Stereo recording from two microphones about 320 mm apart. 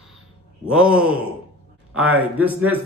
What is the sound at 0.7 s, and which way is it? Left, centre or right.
A man's voice, centre.